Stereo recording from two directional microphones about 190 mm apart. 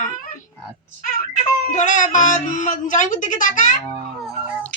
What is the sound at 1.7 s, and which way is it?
Speech, 40° left (ahead or behind).